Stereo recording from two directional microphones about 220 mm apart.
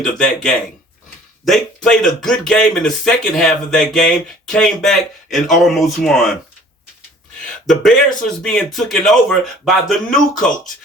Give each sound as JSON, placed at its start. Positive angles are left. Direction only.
{"t": 0.0, "sound": "speech", "side_deg": 5}
{"t": 7.7, "sound": "speech", "side_deg": 5}